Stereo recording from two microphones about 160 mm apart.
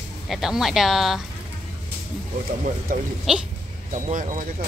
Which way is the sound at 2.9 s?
60° right (ahead or behind).